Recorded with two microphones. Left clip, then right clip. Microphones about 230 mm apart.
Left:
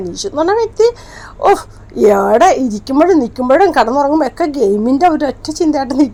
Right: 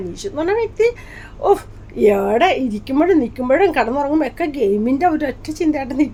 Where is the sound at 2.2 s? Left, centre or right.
Centre.